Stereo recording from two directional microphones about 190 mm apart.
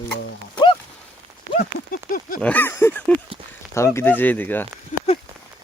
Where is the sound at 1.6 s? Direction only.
45° left (ahead or behind).